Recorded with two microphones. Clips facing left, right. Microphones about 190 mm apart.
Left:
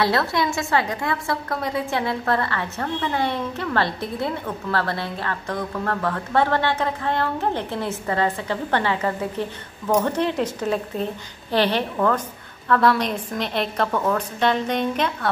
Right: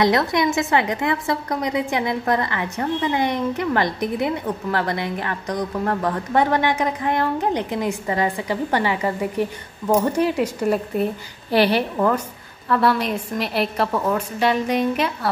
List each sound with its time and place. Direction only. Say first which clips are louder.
0.0 s a woman's voice: right 3 dB; 15° right (ahead or behind)